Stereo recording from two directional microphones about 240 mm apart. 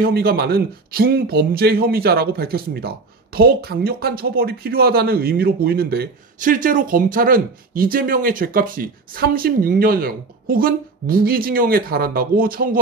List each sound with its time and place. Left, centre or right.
0.0 s speech: right